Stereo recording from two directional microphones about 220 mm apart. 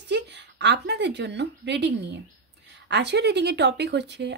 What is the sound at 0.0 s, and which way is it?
A woman's voice, 50° right (ahead or behind).